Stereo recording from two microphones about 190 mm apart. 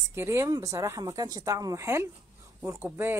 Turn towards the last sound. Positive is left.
turn(degrees=-10)  # may be behind; listen again after turning